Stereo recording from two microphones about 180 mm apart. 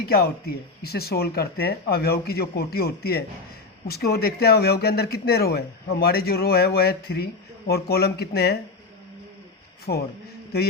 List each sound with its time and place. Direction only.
0.0 s speech: 60° left (ahead or behind)
9.9 s speech: 65° left (ahead or behind)